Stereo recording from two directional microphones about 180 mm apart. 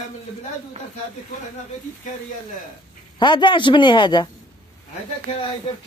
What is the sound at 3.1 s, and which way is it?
Speech, 25° left (ahead or behind).